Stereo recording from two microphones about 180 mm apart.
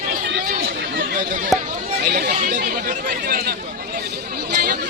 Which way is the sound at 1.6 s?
40° right (ahead or behind).